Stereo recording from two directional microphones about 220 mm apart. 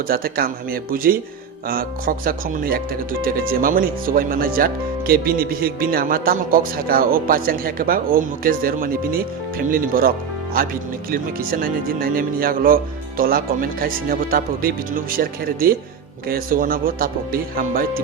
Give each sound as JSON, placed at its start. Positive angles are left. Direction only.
{"t": 0.1, "sound": "speech", "side_deg": -40}
{"t": 11.1, "sound": "speech", "side_deg": -40}